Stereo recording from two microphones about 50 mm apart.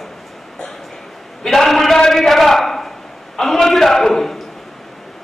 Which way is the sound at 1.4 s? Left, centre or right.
Centre.